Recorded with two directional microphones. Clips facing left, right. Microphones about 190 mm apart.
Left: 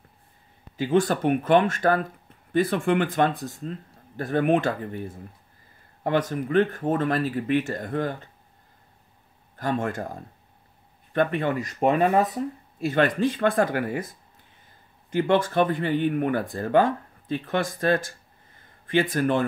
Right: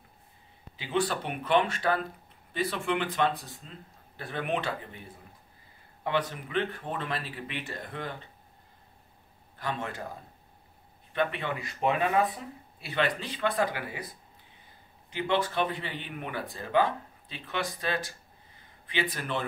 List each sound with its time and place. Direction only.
0.7 s speech: 45° left (ahead or behind)
9.6 s speech: 45° left (ahead or behind)
11.1 s speech: 45° left (ahead or behind)